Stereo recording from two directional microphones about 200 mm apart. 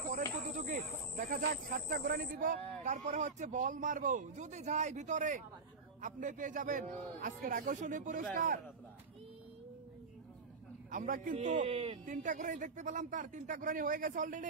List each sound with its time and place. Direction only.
0.1 s a man's voice: 40° right (ahead or behind)
10.9 s a man's voice: 40° right (ahead or behind)